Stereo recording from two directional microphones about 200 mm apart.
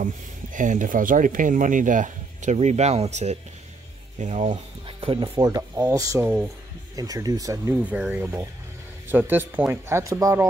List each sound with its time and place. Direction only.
0.0 s speech: 40° right (ahead or behind); by 10.4 s 15° right (ahead or behind)